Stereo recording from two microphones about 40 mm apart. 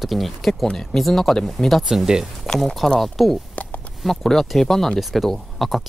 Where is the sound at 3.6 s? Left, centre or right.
Left.